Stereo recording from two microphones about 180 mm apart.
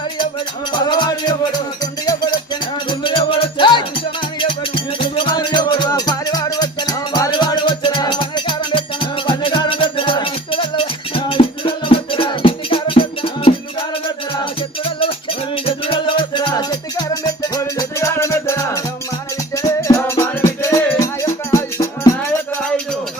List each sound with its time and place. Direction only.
0.7 s music: 25° left (ahead or behind)
15.6 s music: 30° left (ahead or behind)